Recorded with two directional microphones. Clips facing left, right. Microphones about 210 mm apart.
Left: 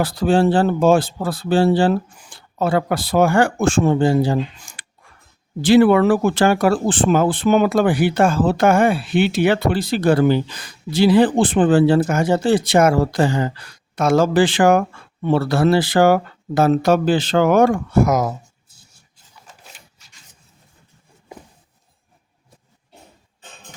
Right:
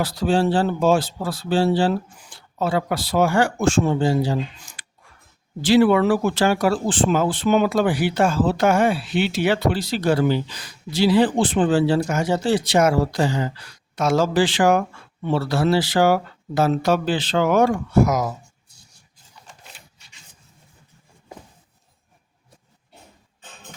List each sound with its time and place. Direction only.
0.0 s speech: 55° left (ahead or behind)